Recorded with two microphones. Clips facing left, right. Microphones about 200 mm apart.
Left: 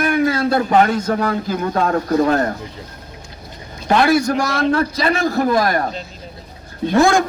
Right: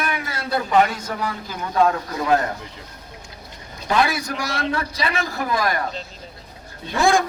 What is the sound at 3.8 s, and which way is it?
A man's voice, 45° left (ahead or behind).